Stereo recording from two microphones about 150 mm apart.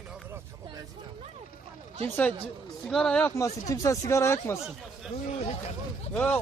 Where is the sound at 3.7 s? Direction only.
20° left (ahead or behind).